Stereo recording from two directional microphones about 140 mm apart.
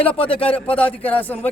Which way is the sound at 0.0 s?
10° left (ahead or behind).